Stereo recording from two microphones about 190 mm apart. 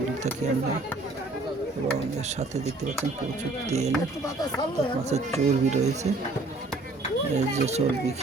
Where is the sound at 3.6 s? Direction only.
35° right (ahead or behind).